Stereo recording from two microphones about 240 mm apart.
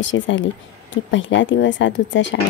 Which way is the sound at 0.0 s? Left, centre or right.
Left.